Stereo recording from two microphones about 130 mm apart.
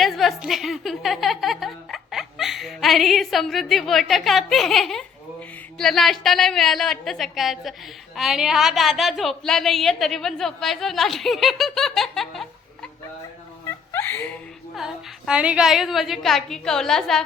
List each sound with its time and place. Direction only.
0.0 s a woman's voice: centre (ahead or behind)
13.7 s a sound: 15° left (ahead or behind)
14.8 s a woman's voice: 5° right (ahead or behind)